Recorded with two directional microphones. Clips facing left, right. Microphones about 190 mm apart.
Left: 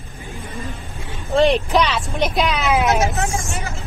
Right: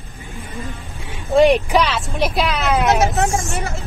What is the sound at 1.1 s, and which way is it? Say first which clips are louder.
Speech: right 3 dB; 10° right (ahead or behind).